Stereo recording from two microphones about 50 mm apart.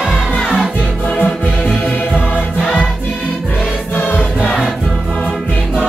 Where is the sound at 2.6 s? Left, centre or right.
Centre.